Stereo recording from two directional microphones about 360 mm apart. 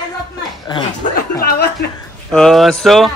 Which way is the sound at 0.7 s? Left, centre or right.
Left.